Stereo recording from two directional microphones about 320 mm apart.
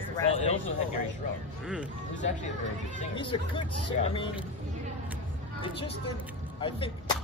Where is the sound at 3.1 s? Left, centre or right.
Centre.